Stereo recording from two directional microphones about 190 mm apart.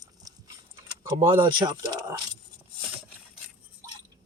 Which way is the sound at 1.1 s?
25° right (ahead or behind).